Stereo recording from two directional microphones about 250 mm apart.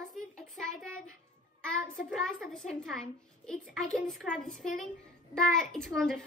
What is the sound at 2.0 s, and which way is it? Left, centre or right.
A child's voice, centre.